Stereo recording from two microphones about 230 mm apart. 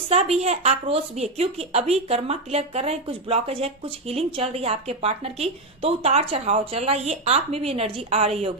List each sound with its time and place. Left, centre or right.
0.4 s a woman's voice: right